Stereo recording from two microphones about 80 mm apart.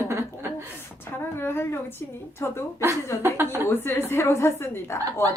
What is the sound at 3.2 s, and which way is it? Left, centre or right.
Speech, right.